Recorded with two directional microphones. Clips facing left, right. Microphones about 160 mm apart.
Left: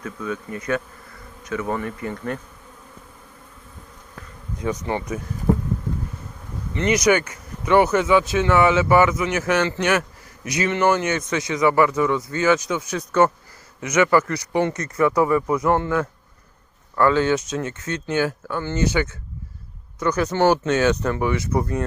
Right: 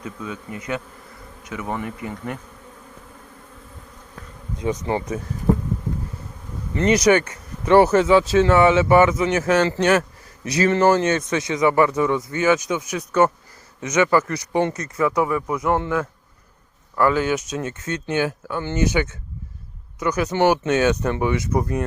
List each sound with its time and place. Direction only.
0.0 s a man's voice: 20° right (ahead or behind)
4.5 s a man's voice: 20° right (ahead or behind)
6.7 s a man's voice: 30° right (ahead or behind)
14.9 s speech: 5° right (ahead or behind)
16.9 s a man's voice: 15° right (ahead or behind)